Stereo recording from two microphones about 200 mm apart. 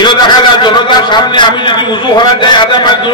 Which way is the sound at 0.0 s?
25° left (ahead or behind).